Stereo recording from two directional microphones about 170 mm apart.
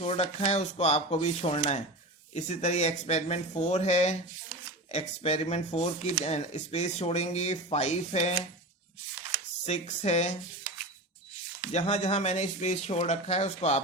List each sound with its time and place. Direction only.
0.0 s speech: 35° left (ahead or behind)
9.6 s speech: 40° left (ahead or behind)
11.7 s speech: 40° left (ahead or behind)